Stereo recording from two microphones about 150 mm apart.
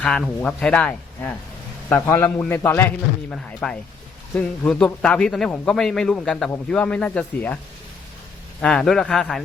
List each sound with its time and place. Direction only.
0.0 s speech: 5° left (ahead or behind)
2.0 s a man's voice: 20° left (ahead or behind)
8.6 s a man's voice: 5° left (ahead or behind)